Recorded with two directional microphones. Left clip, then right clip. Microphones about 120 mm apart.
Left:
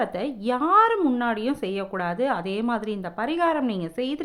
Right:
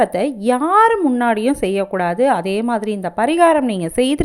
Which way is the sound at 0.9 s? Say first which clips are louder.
Right 6 dB; 20° right (ahead or behind).